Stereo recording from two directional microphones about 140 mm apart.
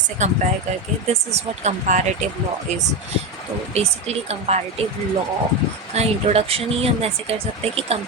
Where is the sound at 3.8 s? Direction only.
50° right (ahead or behind).